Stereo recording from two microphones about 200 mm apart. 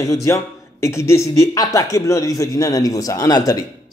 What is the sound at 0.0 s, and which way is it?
A man's voice, 15° left (ahead or behind).